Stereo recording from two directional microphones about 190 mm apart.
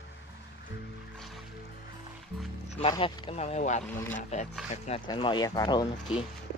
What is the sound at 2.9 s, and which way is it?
Speech, 30° left (ahead or behind).